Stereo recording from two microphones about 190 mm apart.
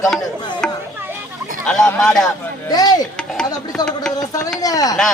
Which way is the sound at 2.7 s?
20° left (ahead or behind).